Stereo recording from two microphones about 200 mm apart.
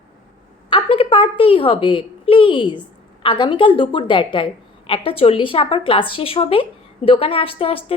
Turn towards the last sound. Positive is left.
turn(degrees=30)  # may be behind; listen again after turning